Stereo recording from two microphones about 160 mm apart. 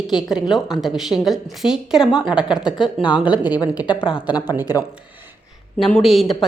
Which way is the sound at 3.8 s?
30° left (ahead or behind).